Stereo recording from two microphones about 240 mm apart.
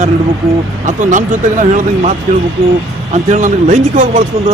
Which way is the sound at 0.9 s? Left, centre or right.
Right.